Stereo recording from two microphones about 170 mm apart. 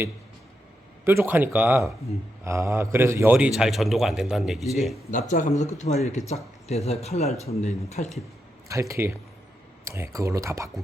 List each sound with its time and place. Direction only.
1.0 s a man's voice: 15° right (ahead or behind)
3.3 s speech: 5° right (ahead or behind)
5.3 s speech: 45° left (ahead or behind)
8.6 s a man's voice: 15° right (ahead or behind)